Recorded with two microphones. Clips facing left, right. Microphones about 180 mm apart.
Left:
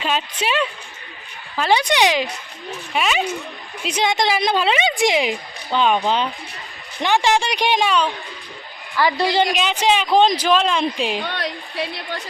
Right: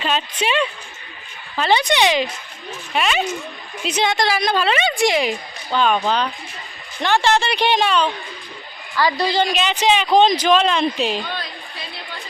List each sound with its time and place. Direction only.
0.0 s a woman's voice: 5° left (ahead or behind)
9.0 s a woman's voice: 20° left (ahead or behind)
9.5 s a woman's voice: 10° left (ahead or behind)
11.2 s a woman's voice: 75° left (ahead or behind)